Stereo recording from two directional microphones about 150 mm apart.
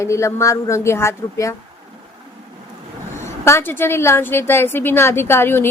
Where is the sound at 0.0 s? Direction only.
20° left (ahead or behind).